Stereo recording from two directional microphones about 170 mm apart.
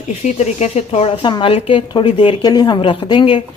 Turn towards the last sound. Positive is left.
turn(degrees=30)  # may be behind; listen again after turning